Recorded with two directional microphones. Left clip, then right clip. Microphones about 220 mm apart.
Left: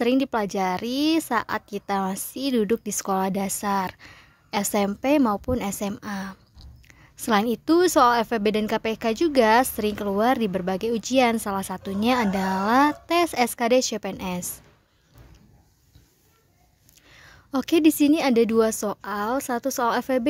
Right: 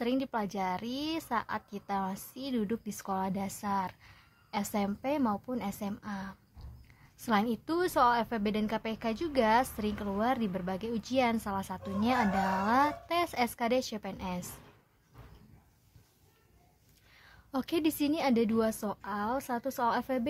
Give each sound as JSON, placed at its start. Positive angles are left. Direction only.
{"t": 0.0, "sound": "a woman's voice", "side_deg": 35}
{"t": 17.1, "sound": "a woman's voice", "side_deg": 35}